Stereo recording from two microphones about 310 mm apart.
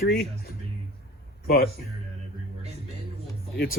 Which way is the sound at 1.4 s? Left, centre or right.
Left.